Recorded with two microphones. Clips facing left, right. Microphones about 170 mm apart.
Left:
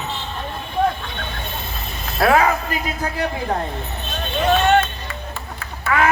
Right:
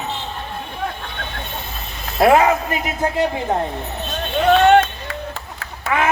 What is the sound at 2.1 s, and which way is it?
A woman's voice, 20° right (ahead or behind).